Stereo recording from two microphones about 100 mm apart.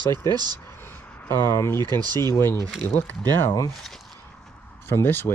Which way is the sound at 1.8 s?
45° right (ahead or behind).